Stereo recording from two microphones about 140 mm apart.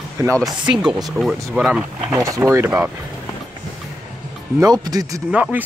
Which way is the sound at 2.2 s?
20° right (ahead or behind).